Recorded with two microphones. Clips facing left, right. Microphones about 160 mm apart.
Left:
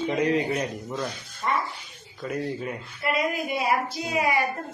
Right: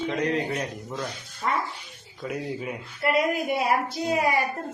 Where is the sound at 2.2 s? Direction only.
5° right (ahead or behind).